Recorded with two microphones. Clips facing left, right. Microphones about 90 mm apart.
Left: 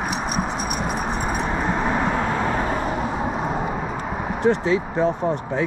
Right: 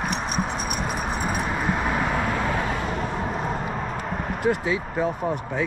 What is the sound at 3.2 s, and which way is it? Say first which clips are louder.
Vehicle: left 3 dB; centre (ahead or behind).